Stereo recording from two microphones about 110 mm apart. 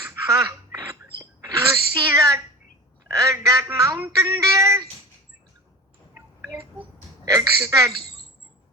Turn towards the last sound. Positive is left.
turn(degrees=-30)  # may be behind; listen again after turning